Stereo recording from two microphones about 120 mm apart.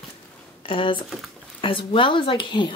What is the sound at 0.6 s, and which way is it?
Speech, 45° left (ahead or behind).